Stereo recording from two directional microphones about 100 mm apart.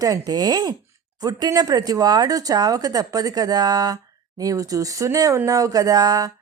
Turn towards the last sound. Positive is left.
turn(degrees=-40)  # may be behind; listen again after turning